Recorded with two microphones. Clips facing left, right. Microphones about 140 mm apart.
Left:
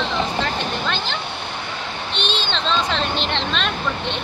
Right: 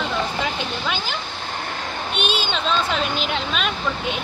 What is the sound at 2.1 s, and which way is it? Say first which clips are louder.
Speech: right 1 dB; 5° right (ahead or behind).